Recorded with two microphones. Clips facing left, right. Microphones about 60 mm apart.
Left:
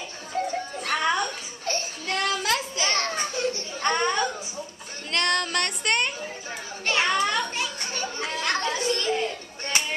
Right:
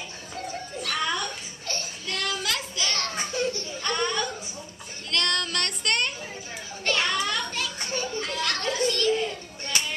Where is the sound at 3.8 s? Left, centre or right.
Left.